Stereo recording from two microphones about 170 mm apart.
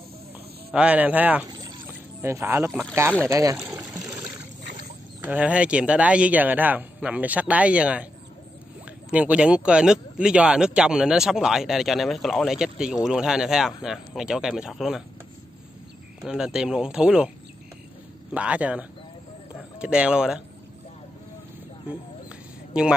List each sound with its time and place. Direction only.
0.7 s speech: 10° right (ahead or behind)
1.9 s a sound: 15° right (ahead or behind)
2.9 s speech: 15° right (ahead or behind)
3.6 s trickle: 15° right (ahead or behind)
5.2 s speech: 10° right (ahead or behind)
9.1 s speech: 10° right (ahead or behind)
16.2 s speech: 5° right (ahead or behind)
18.3 s speech: 10° right (ahead or behind)
22.7 s speech: 5° right (ahead or behind)